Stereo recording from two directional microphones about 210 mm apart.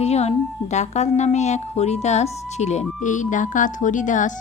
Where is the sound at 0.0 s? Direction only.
30° left (ahead or behind).